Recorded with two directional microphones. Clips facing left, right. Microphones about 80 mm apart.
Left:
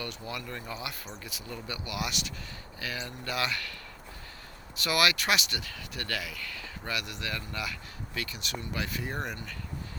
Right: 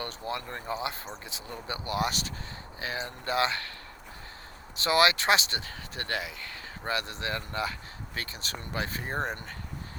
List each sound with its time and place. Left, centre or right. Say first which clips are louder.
0.0 s speech: right 3 dB; right
4.8 s speech: right 4 dB; right